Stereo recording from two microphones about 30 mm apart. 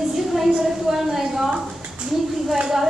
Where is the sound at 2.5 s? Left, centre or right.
Centre.